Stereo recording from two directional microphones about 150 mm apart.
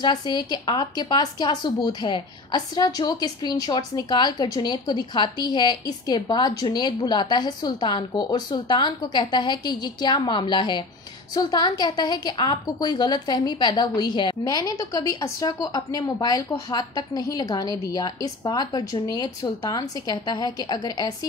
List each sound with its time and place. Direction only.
0.0 s a woman's voice: 30° left (ahead or behind)